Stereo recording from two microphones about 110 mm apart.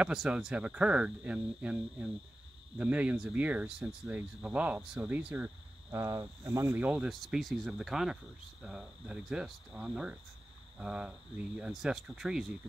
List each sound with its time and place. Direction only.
0.0 s speech: 10° right (ahead or behind)
5.9 s speech: 25° right (ahead or behind)
7.1 s speech: centre (ahead or behind)